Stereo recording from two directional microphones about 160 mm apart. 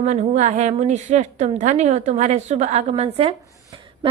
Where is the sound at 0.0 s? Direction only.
45° right (ahead or behind).